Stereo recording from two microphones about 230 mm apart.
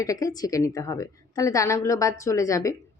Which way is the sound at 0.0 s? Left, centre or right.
Centre.